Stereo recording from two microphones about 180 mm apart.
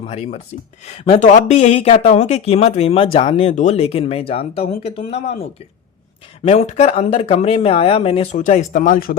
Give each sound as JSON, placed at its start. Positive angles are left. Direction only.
{"t": 0.0, "sound": "speech", "side_deg": 35}
{"t": 6.4, "sound": "speech", "side_deg": 35}